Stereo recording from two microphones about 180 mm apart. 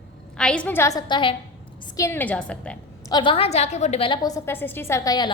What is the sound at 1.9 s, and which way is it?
Speech, 15° left (ahead or behind).